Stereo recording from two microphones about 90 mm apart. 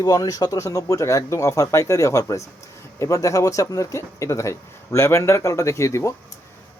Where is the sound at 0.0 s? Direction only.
45° left (ahead or behind).